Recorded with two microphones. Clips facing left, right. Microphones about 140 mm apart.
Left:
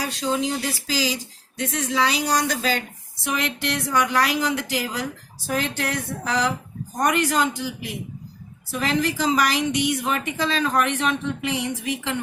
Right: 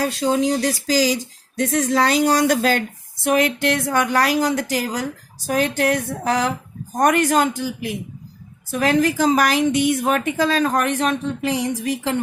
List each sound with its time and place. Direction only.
0.0 s a woman's voice: 45° right (ahead or behind)